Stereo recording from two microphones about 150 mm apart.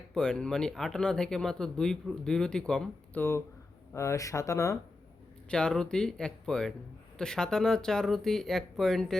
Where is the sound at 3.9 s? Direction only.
20° left (ahead or behind).